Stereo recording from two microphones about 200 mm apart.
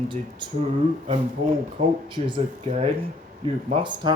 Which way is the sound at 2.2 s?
30° right (ahead or behind).